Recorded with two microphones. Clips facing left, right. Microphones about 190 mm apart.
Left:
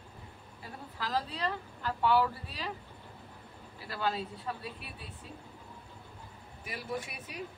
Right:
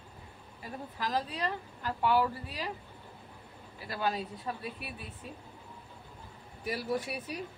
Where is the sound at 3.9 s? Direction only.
15° right (ahead or behind).